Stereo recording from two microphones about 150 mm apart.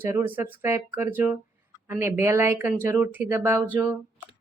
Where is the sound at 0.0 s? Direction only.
15° right (ahead or behind).